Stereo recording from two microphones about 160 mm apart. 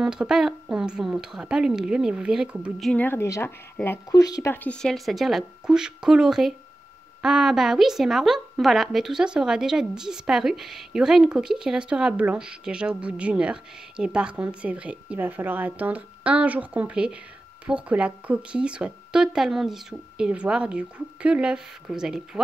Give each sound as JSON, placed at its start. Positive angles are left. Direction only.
{"t": 0.0, "sound": "speech", "side_deg": -5}
{"t": 2.9, "sound": "a woman's voice", "side_deg": 10}